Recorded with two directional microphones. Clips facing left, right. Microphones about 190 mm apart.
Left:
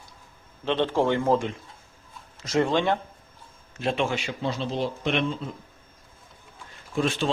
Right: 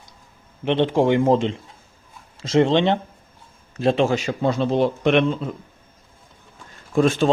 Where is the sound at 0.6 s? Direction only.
15° right (ahead or behind).